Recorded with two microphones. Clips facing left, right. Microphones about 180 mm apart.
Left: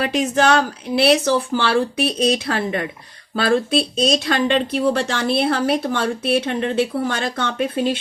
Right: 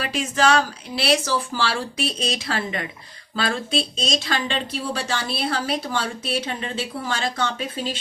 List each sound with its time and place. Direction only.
0.0 s speech: 60° left (ahead or behind)